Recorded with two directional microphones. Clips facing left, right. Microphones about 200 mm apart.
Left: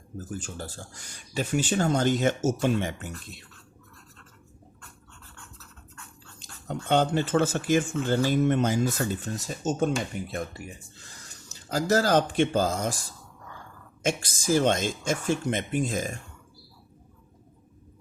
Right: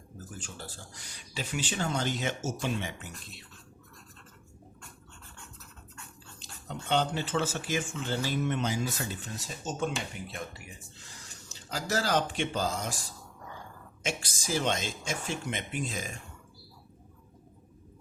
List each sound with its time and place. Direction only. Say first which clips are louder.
0.4 s speech: left 6 dB; 45° left (ahead or behind)
6.4 s speech: left 6 dB; 50° left (ahead or behind)
11.7 s speech: left 7 dB; 45° left (ahead or behind)
14.0 s speech: left 7 dB; 45° left (ahead or behind)